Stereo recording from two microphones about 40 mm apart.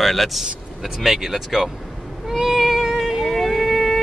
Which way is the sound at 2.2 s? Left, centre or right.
Centre.